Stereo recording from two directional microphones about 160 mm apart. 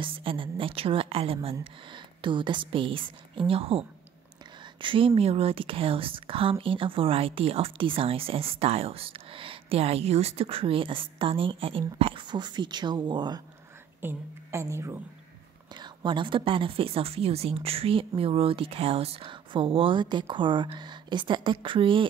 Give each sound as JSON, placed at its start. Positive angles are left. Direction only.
{"t": 0.0, "sound": "speech", "side_deg": -35}
{"t": 14.0, "sound": "speech", "side_deg": -15}
{"t": 15.7, "sound": "speech", "side_deg": -30}